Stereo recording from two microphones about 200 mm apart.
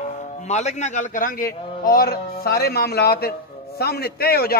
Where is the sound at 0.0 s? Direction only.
35° left (ahead or behind).